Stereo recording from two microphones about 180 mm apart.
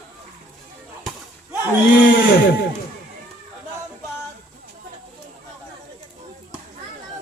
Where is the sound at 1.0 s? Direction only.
10° right (ahead or behind).